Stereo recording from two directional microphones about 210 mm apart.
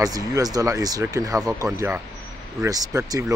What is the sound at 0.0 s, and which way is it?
Speech, 15° right (ahead or behind).